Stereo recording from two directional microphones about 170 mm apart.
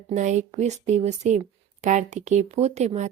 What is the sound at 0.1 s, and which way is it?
Speech, 45° right (ahead or behind).